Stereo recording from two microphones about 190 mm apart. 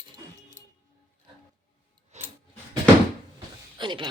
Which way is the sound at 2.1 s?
35° right (ahead or behind).